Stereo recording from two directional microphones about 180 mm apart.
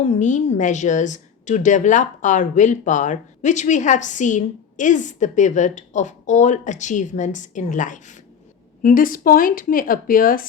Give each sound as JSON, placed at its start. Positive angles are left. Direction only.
{"t": 0.0, "sound": "a woman's voice", "side_deg": 40}